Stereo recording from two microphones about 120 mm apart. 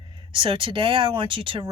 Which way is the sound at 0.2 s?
45° right (ahead or behind).